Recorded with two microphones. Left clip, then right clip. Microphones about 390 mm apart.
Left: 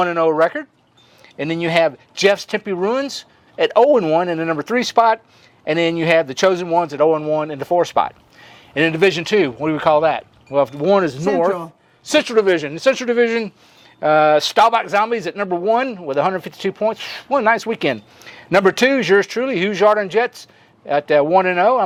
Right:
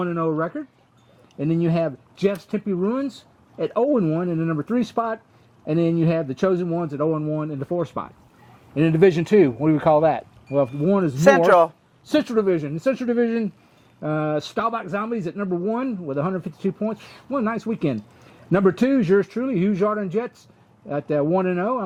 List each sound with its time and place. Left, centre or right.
0.2 s speech: left
8.7 s a man's voice: left
9.0 s speech: left
10.8 s a man's voice: left
11.4 s a man's voice: right
12.1 s speech: left
14.0 s a man's voice: left